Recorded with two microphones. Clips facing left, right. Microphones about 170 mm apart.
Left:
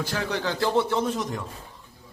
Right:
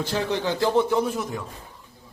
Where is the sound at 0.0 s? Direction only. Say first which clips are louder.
Right 3 dB; 20° right (ahead or behind).